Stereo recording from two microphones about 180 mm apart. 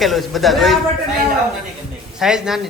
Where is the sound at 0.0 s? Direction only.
Centre (ahead or behind).